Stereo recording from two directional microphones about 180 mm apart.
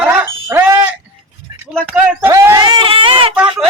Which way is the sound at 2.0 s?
15° right (ahead or behind).